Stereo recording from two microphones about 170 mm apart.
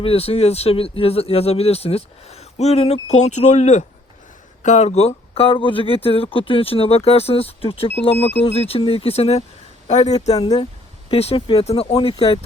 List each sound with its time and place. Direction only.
0.0 s speech: 35° left (ahead or behind)